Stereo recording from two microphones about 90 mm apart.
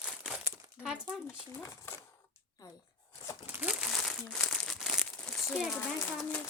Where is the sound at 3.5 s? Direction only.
20° right (ahead or behind).